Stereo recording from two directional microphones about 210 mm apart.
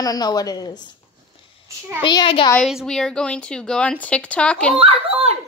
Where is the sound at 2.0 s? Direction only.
20° left (ahead or behind).